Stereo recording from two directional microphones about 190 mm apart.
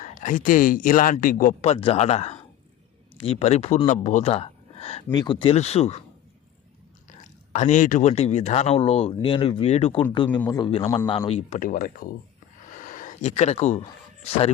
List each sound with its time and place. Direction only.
0.0 s speech: 40° left (ahead or behind)
7.5 s speech: 40° left (ahead or behind)
10.4 s a man's voice: 15° left (ahead or behind)
11.3 s speech: 35° left (ahead or behind)
12.8 s a sound: 45° left (ahead or behind)
14.3 s speech: 30° left (ahead or behind)